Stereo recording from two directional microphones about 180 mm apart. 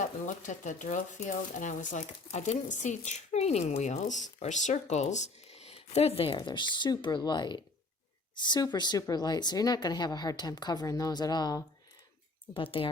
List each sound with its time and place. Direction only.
0.0 s a woman's voice: 45° left (ahead or behind)